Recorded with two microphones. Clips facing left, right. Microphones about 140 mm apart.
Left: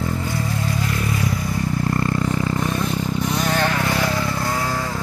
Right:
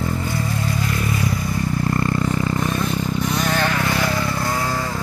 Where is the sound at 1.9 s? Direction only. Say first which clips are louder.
Right 1 dB; centre (ahead or behind).